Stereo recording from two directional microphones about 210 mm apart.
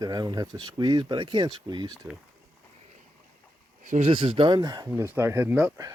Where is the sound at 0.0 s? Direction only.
20° right (ahead or behind).